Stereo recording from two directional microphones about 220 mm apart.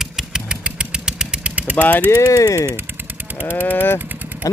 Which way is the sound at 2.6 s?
10° right (ahead or behind).